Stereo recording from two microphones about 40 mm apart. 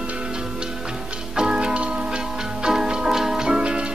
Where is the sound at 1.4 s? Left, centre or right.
Right.